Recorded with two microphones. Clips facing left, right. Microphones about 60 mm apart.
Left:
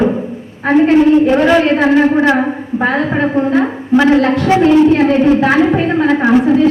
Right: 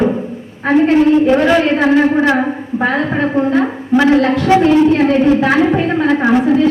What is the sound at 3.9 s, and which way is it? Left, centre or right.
A woman's voice, centre.